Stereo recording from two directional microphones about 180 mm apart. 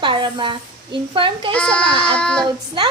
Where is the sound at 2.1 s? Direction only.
5° left (ahead or behind).